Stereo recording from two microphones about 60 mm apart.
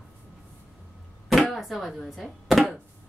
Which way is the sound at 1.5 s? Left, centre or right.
Centre.